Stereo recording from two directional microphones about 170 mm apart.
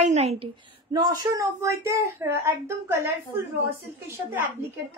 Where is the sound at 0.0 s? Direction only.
40° right (ahead or behind); by 3.4 s 15° right (ahead or behind).